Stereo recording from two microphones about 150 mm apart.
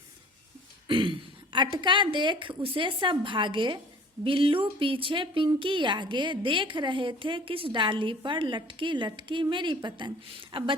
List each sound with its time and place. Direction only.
0.9 s a woman's voice: 35° right (ahead or behind)